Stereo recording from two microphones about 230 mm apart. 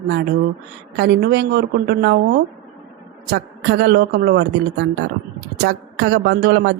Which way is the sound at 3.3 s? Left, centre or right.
Right.